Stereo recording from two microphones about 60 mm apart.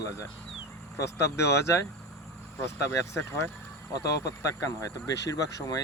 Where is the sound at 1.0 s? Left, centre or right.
Left.